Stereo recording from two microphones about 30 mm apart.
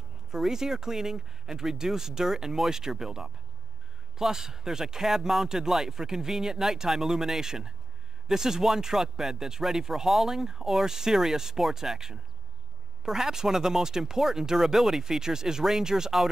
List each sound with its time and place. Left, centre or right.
0.3 s speech: centre